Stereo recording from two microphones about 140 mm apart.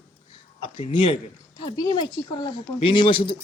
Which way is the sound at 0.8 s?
35° left (ahead or behind).